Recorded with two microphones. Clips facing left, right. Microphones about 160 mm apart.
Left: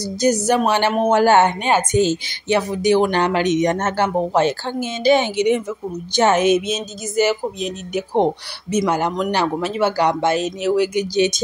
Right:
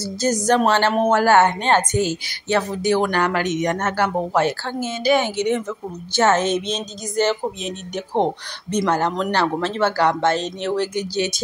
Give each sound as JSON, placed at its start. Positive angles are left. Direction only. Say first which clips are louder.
{"t": 0.2, "sound": "speech", "louder": "left 1 dB", "side_deg": 10}